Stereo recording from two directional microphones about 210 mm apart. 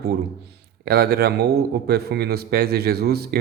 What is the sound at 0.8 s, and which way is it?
A man's voice, 45° right (ahead or behind).